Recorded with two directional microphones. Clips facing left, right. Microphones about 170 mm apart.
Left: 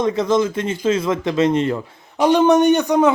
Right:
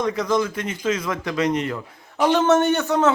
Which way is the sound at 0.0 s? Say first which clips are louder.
Left 4 dB; 25° left (ahead or behind).